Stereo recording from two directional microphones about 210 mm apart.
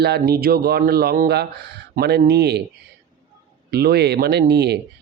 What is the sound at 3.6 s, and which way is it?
Speech, 50° right (ahead or behind).